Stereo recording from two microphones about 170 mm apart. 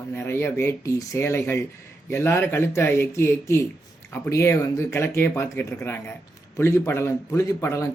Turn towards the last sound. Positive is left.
turn(degrees=15)  # may be behind; listen again after turning